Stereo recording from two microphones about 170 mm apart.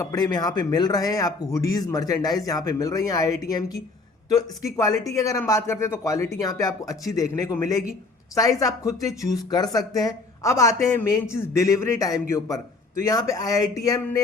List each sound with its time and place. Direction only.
0.0 s speech: 20° left (ahead or behind)